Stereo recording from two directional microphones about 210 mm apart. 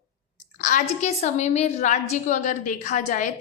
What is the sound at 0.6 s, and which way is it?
A woman's voice, 40° left (ahead or behind).